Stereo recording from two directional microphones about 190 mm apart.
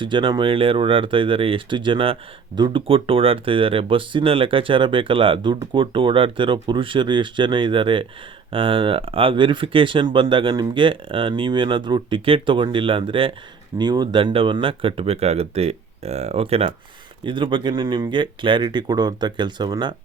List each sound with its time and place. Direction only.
0.0 s speech: 25° right (ahead or behind)